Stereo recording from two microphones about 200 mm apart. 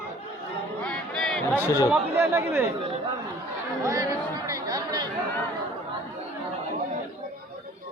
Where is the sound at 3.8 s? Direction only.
15° right (ahead or behind).